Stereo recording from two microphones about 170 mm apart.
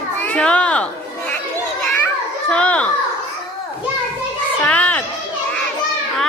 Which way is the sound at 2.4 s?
5° left (ahead or behind).